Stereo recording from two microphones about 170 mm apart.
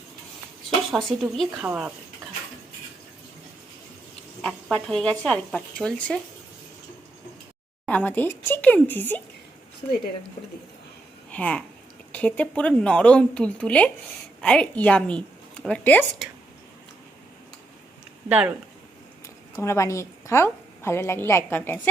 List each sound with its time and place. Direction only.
0.9 s speech: centre (ahead or behind)
4.4 s speech: 5° left (ahead or behind)
7.9 s a woman's voice: 10° left (ahead or behind)
11.3 s a woman's voice: 5° left (ahead or behind)
18.3 s speech: 10° right (ahead or behind)
19.5 s a woman's voice: 15° left (ahead or behind)